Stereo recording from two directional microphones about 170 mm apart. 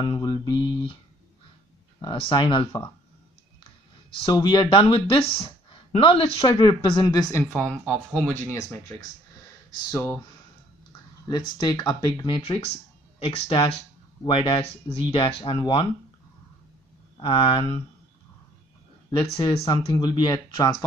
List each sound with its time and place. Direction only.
0.0 s speech: 25° left (ahead or behind)
2.0 s speech: 30° left (ahead or behind)
4.2 s speech: 25° left (ahead or behind)
7.6 s speech: 10° right (ahead or behind)
7.9 s speech: centre (ahead or behind)
9.8 s speech: 15° left (ahead or behind)
11.2 s speech: 25° left (ahead or behind)
17.2 s speech: 30° left (ahead or behind)
19.1 s speech: 30° left (ahead or behind)